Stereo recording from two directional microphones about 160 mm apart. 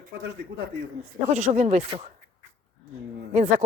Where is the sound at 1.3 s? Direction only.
45° right (ahead or behind).